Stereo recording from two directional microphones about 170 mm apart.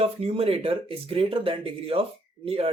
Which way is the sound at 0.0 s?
35° right (ahead or behind).